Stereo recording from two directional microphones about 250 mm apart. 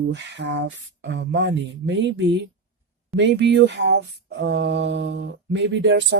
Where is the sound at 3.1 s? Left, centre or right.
Right.